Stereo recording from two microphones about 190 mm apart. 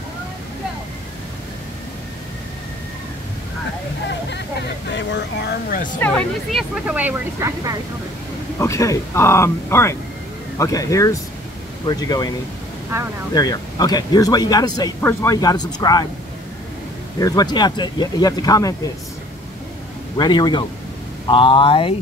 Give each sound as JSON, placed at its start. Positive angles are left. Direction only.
{"t": 4.0, "sound": "a sound", "side_deg": 65}
{"t": 5.9, "sound": "speech", "side_deg": 10}
{"t": 6.5, "sound": "speech", "side_deg": -5}
{"t": 8.5, "sound": "speech", "side_deg": 15}
{"t": 13.3, "sound": "speech", "side_deg": 20}
{"t": 17.2, "sound": "speech", "side_deg": 20}
{"t": 20.2, "sound": "speech", "side_deg": 25}